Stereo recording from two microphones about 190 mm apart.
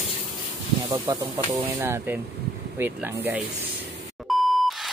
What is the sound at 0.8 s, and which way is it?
Speech, 20° right (ahead or behind).